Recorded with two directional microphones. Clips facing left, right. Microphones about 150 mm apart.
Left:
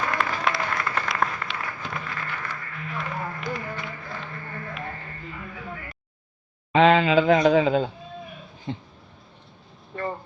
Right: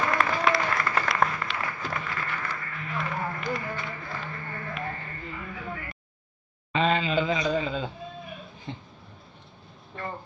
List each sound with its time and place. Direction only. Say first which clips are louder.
0.1 s applause: right 2 dB; centre (ahead or behind)
5.6 s a sound: right 1 dB; centre (ahead or behind)
6.7 s speech: left 7 dB; 75° left (ahead or behind)